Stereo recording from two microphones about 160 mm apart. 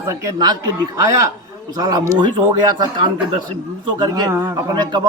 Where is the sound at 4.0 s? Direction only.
25° right (ahead or behind).